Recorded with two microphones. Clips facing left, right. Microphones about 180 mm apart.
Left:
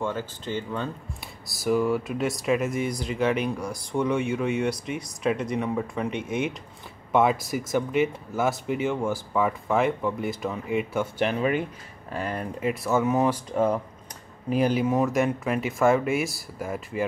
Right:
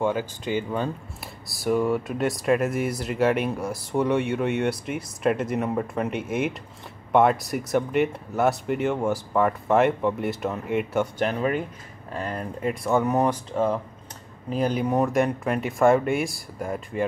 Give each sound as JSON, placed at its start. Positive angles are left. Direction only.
{"t": 0.0, "sound": "speech", "side_deg": -10}
{"t": 1.2, "sound": "speech", "side_deg": 0}
{"t": 11.2, "sound": "speech", "side_deg": -40}
{"t": 12.6, "sound": "speech", "side_deg": 0}